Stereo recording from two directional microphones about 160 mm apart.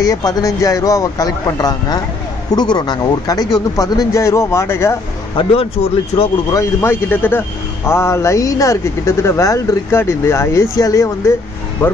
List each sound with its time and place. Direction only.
0.0 s a man's voice: 25° left (ahead or behind)
6.1 s speech: 30° left (ahead or behind)
6.5 s a man's voice: 15° left (ahead or behind)